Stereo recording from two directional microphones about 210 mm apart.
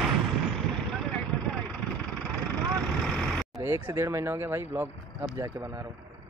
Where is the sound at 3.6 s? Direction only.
10° right (ahead or behind).